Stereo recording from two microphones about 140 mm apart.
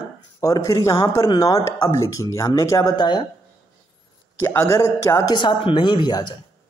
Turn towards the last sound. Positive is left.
turn(degrees=30)  # may be behind; listen again after turning